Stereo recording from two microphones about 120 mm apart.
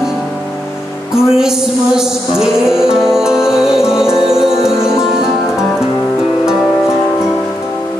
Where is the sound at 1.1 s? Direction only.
5° right (ahead or behind).